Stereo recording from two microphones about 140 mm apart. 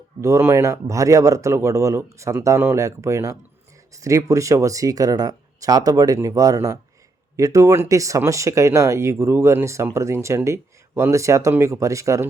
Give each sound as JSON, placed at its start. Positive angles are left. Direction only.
{"t": 0.2, "sound": "speech", "side_deg": -20}